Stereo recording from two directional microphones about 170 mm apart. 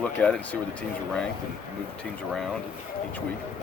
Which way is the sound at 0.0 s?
5° left (ahead or behind).